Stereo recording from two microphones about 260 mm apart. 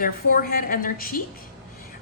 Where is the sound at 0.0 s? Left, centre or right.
Left.